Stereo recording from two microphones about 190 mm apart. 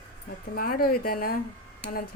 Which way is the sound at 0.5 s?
50° left (ahead or behind).